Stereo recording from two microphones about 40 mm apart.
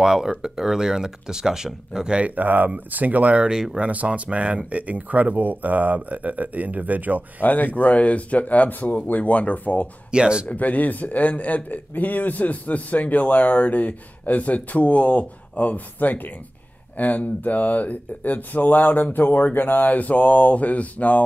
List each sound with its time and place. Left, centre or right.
0.0 s speech: centre
2.3 s speech: right
3.4 s speech: centre
3.7 s speech: right
7.4 s a man's voice: left
10.1 s speech: right
10.5 s a man's voice: left